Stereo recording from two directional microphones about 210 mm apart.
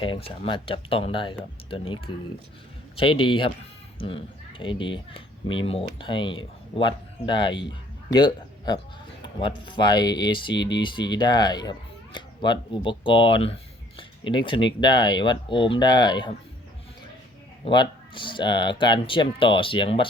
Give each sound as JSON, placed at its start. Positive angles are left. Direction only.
{"t": 0.0, "sound": "speech", "side_deg": 25}
{"t": 17.7, "sound": "speech", "side_deg": 25}